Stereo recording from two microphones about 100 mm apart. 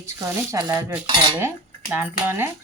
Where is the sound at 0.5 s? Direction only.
30° right (ahead or behind).